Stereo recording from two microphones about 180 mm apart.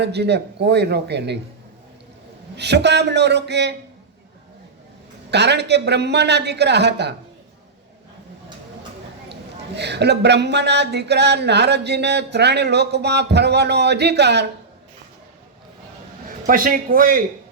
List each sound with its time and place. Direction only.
0.0 s a man's voice: 70° right (ahead or behind)
2.6 s a man's voice: 70° right (ahead or behind)
5.3 s a man's voice: 70° right (ahead or behind)
9.3 s a man's voice: 70° right (ahead or behind)
16.5 s a man's voice: 50° right (ahead or behind)